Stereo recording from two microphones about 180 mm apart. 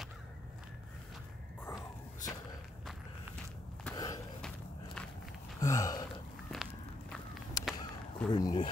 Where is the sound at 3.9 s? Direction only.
20° left (ahead or behind).